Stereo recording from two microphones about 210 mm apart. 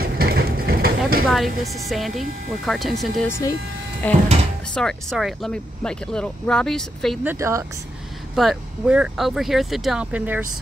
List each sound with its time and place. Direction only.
0.0 s vehicle: 45° right (ahead or behind)
1.3 s speech: centre (ahead or behind)
3.3 s speech: 15° left (ahead or behind)
7.2 s speech: 15° right (ahead or behind)
8.4 s speech: 5° right (ahead or behind)